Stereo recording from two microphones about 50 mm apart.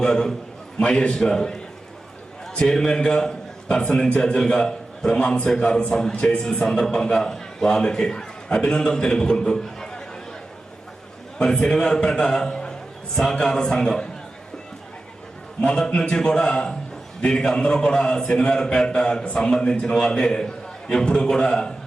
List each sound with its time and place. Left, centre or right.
0.0 s a man's voice: centre
2.6 s a man's voice: centre
6.4 s a man's voice: centre
11.4 s a man's voice: centre
15.6 s a man's voice: centre